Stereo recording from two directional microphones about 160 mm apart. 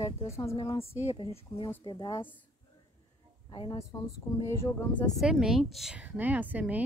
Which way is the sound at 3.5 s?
25° left (ahead or behind).